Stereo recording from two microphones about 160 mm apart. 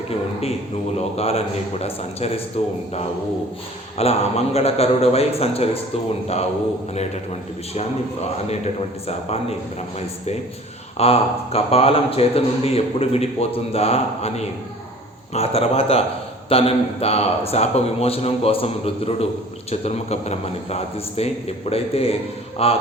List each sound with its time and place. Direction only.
0.9 s speech: 40° left (ahead or behind)
3.9 s speech: 40° left (ahead or behind)
7.7 s speech: 40° left (ahead or behind)
10.9 s speech: 40° left (ahead or behind)